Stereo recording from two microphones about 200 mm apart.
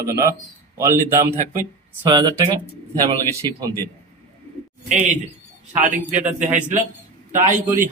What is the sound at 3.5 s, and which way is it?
Speech, 10° left (ahead or behind).